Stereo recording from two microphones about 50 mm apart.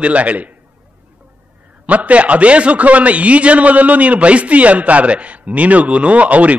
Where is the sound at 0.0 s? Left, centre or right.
Right.